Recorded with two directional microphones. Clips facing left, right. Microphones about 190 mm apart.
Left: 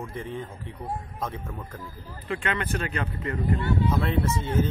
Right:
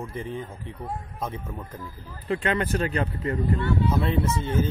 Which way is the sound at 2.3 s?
35° right (ahead or behind).